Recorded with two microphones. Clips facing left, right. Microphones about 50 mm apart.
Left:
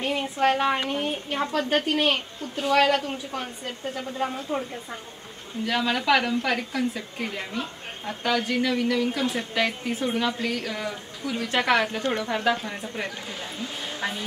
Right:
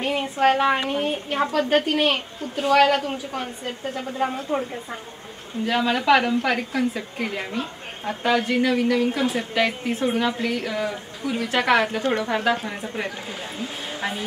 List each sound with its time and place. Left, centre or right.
0.0 s a woman's voice: centre
5.7 s a woman's voice: centre
8.7 s speech: right
9.1 s a woman's voice: centre
13.6 s a sound: centre